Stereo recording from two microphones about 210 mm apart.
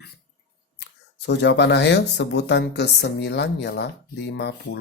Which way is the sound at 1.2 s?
55° left (ahead or behind).